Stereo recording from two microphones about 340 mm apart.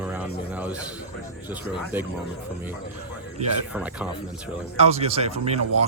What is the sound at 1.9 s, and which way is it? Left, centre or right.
Speech, centre.